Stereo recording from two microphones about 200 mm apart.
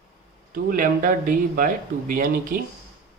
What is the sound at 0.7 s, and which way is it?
Speech, 40° right (ahead or behind).